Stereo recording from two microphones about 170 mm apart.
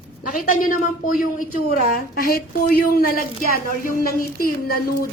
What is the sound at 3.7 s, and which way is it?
A woman's voice, 55° left (ahead or behind).